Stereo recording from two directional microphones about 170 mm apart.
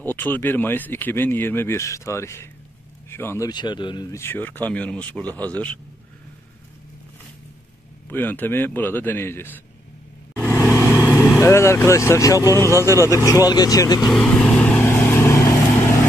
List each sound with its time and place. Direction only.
0.0 s speech: 10° left (ahead or behind)
8.1 s speech: 10° left (ahead or behind)
10.7 s speech: 15° left (ahead or behind)
14.1 s vehicle: 5° left (ahead or behind)